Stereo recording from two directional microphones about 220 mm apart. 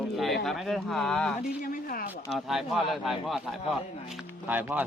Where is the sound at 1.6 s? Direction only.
40° left (ahead or behind).